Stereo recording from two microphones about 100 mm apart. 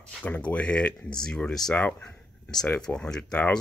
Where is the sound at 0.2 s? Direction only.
15° left (ahead or behind).